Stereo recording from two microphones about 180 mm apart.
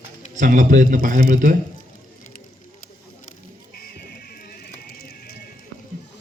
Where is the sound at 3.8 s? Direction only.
55° left (ahead or behind).